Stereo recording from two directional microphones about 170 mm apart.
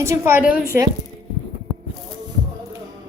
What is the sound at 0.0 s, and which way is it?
Speech, 15° right (ahead or behind).